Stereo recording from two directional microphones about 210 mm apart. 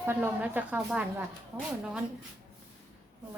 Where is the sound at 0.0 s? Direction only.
10° right (ahead or behind).